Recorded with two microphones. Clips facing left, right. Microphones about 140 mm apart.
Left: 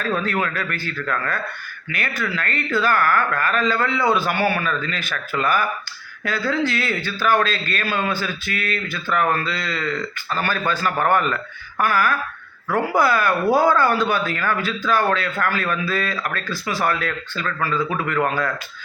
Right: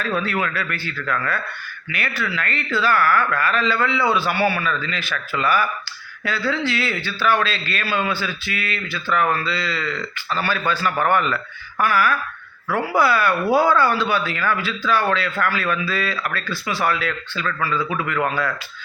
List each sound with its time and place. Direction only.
0.2 s a man's voice: 40° left (ahead or behind)